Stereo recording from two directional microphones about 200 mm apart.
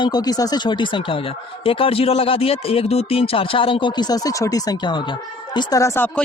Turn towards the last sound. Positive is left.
turn(degrees=10)  # may be behind; listen again after turning